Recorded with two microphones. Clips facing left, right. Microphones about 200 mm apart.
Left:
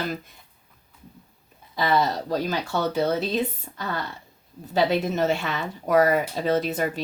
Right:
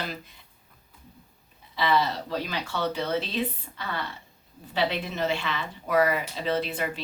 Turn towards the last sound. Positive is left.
turn(degrees=40)  # may be behind; listen again after turning